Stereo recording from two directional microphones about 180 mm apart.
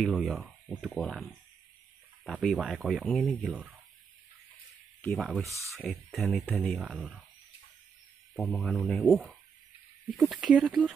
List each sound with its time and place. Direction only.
0.0 s speech: centre (ahead or behind)
5.0 s speech: centre (ahead or behind)
5.5 s speech: 15° right (ahead or behind)
5.8 s speech: centre (ahead or behind)
8.4 s speech: 5° left (ahead or behind)